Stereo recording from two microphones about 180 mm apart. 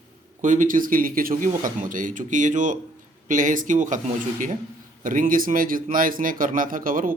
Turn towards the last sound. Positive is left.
turn(degrees=-50)  # may be behind; listen again after turning